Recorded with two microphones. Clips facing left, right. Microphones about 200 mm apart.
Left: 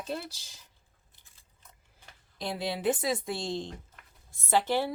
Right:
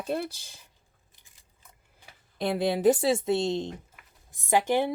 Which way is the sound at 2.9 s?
30° right (ahead or behind).